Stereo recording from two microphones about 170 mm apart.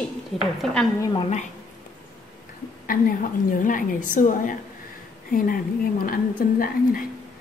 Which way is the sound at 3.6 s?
50° left (ahead or behind).